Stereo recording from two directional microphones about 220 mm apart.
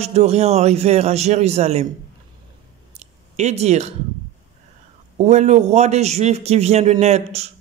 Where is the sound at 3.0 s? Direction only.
30° right (ahead or behind).